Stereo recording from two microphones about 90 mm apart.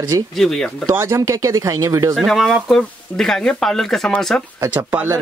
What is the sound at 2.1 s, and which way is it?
Speech, centre (ahead or behind).